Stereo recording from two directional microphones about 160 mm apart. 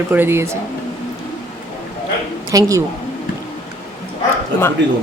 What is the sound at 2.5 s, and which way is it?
Speech, 20° right (ahead or behind).